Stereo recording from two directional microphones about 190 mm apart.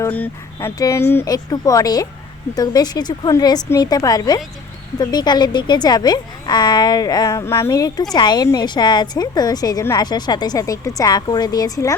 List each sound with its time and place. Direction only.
0.0 s a woman's voice: 10° left (ahead or behind)